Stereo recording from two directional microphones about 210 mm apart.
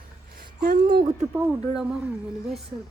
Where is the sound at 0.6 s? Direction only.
45° right (ahead or behind).